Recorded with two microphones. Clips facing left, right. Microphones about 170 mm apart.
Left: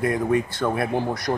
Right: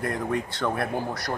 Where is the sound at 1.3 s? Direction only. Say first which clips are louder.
Left 7 dB; 25° left (ahead or behind).